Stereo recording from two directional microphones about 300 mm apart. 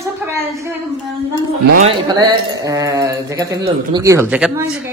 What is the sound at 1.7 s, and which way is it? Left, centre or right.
Speech, centre.